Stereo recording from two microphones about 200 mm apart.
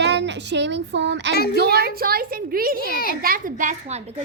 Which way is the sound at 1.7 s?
50° right (ahead or behind).